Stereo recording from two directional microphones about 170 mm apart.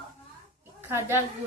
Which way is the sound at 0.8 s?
15° right (ahead or behind).